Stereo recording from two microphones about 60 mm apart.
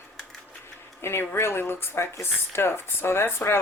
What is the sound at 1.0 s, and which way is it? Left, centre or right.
Speech, left.